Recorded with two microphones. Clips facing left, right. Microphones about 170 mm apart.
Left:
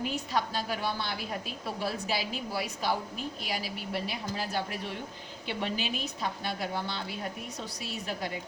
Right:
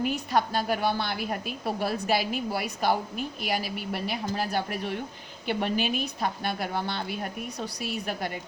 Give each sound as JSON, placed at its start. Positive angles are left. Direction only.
{"t": 0.0, "sound": "a woman's voice", "side_deg": -60}